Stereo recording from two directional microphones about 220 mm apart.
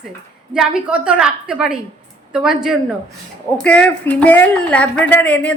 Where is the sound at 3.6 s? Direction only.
5° left (ahead or behind).